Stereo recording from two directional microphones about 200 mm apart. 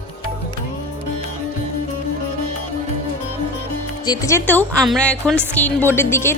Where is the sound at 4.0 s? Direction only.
20° left (ahead or behind).